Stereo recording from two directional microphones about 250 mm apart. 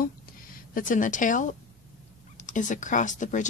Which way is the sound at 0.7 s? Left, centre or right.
Left.